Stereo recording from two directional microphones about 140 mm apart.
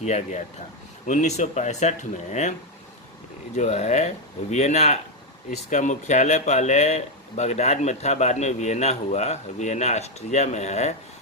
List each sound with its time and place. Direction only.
0.0 s speech: 55° left (ahead or behind)
3.5 s speech: 55° left (ahead or behind)